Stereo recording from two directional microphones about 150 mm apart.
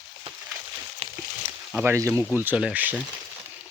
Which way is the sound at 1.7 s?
10° right (ahead or behind).